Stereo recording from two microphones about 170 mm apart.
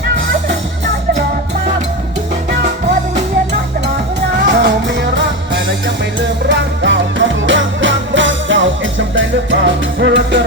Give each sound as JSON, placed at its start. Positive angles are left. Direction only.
{"t": 4.4, "sound": "music", "side_deg": -90}